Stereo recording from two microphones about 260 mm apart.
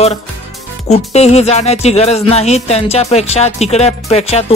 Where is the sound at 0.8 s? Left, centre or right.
Left.